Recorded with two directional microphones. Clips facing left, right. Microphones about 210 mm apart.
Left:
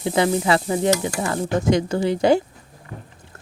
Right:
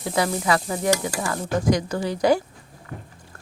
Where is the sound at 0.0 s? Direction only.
25° left (ahead or behind).